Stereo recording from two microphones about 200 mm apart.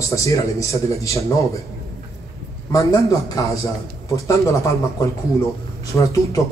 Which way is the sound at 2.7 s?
15° left (ahead or behind).